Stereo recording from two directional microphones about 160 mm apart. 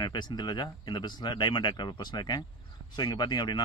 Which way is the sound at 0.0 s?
25° left (ahead or behind).